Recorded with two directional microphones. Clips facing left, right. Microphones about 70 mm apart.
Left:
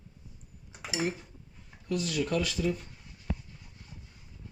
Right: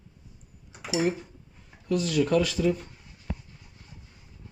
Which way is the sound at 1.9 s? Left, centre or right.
Right.